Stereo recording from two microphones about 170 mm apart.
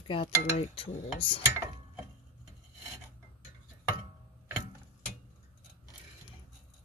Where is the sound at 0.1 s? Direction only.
30° left (ahead or behind).